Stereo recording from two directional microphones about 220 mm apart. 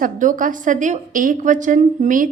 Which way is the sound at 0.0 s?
35° right (ahead or behind).